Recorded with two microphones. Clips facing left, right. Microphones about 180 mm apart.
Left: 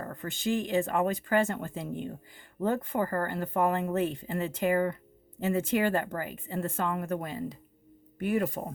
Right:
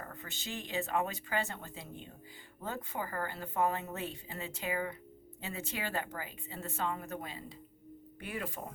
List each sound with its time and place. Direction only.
0.0 s speech: 50° left (ahead or behind)